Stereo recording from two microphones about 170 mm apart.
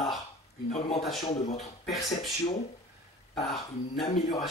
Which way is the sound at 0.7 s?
40° left (ahead or behind).